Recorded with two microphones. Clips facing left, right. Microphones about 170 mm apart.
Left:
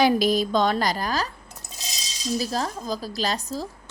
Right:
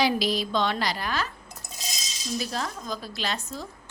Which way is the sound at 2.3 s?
35° left (ahead or behind).